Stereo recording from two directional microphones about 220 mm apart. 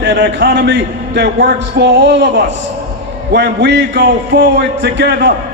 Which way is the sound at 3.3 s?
50° right (ahead or behind).